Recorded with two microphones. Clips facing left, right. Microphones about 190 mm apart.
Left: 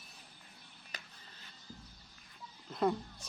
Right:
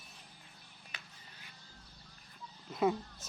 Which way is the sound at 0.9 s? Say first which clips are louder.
Left 2 dB; 40° left (ahead or behind).